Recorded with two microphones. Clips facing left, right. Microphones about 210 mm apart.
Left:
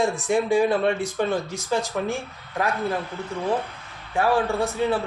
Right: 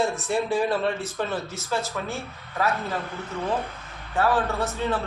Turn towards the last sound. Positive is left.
turn(degrees=15)  # may be behind; listen again after turning